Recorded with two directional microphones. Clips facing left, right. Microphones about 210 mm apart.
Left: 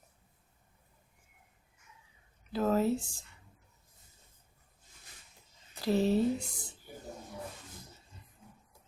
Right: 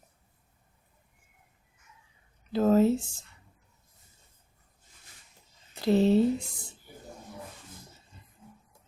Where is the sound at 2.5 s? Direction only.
25° right (ahead or behind).